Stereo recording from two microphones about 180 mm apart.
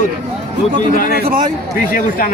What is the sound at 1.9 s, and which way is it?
Speech, 50° left (ahead or behind).